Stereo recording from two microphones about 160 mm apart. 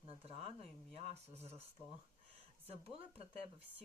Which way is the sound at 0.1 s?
40° right (ahead or behind).